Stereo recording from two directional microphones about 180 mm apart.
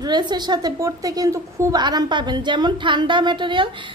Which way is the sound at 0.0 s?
25° right (ahead or behind).